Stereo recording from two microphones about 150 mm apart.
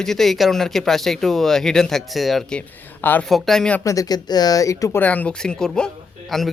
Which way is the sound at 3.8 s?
20° left (ahead or behind).